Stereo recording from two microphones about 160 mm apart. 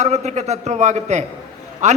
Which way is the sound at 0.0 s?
45° right (ahead or behind).